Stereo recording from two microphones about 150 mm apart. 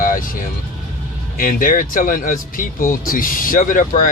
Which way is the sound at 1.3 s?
70° left (ahead or behind).